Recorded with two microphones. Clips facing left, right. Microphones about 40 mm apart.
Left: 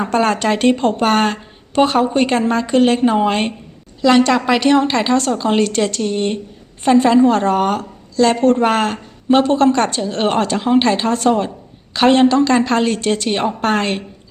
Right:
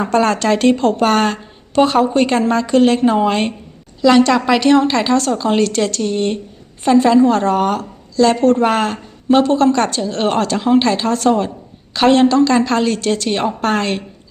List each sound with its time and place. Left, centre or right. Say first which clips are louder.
0.1 s a woman's voice: right 2 dB; left
6.0 s a woman's voice: right 1 dB; centre
11.3 s a woman's voice: right 1 dB; centre
11.9 s a woman's voice: right 1 dB; left